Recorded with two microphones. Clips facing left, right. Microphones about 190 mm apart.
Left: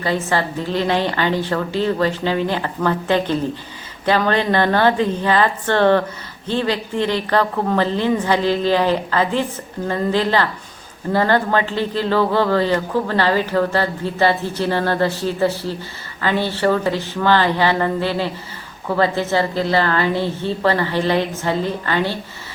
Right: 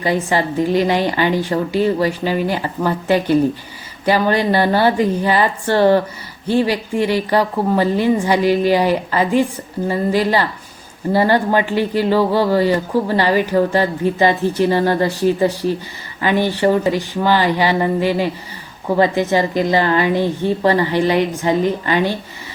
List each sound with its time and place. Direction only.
0.0 s speech: 15° right (ahead or behind)